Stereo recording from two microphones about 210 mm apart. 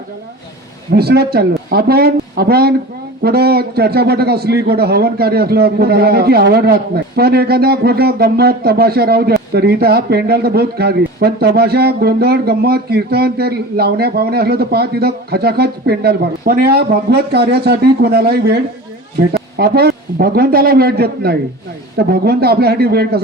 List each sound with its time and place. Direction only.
0.9 s a man's voice: 50° right (ahead or behind)
19.5 s a man's voice: 50° right (ahead or behind)